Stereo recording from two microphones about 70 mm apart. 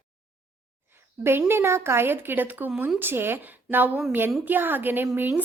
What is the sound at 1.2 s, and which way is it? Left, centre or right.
A woman's voice, right.